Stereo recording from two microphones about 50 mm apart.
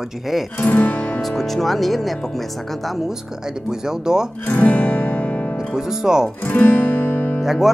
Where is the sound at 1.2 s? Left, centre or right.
Centre.